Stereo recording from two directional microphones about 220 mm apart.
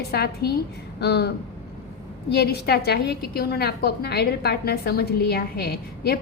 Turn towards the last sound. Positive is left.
turn(degrees=45)  # may be behind; listen again after turning